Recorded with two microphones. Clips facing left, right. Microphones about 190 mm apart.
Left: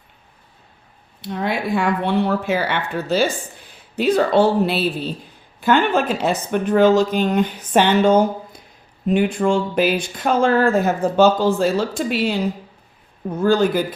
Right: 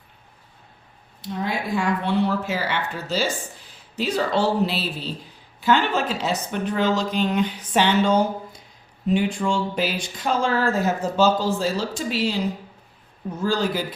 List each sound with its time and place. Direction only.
1.3 s speech: 65° left (ahead or behind)